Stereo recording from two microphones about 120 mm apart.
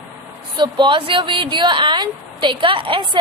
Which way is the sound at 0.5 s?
40° right (ahead or behind).